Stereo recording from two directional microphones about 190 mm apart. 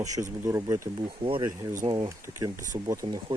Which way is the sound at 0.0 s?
15° right (ahead or behind).